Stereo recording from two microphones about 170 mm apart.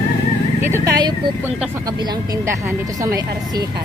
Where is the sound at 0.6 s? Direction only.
15° right (ahead or behind).